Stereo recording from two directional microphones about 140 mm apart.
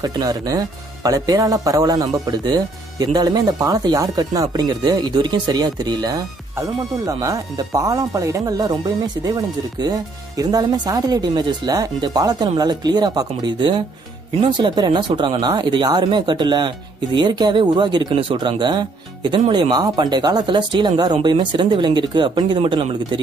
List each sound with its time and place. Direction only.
0.0 s speech: 25° right (ahead or behind)